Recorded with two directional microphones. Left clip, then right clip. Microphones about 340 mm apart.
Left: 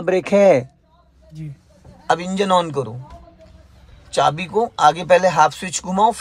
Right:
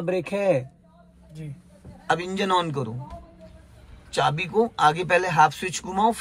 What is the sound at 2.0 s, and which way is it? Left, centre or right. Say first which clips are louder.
Speech: left 6 dB; centre.